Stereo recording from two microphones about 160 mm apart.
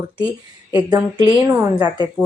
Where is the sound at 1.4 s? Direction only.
20° right (ahead or behind).